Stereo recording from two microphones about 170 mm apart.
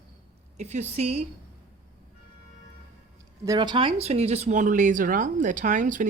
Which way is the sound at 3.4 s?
25° right (ahead or behind).